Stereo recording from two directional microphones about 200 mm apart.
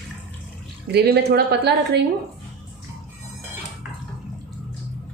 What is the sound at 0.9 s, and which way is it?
A woman's voice, 55° right (ahead or behind).